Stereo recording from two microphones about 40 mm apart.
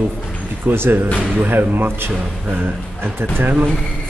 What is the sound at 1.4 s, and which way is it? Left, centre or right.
Speech, right.